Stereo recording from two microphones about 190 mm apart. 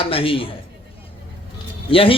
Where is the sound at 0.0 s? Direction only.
30° left (ahead or behind).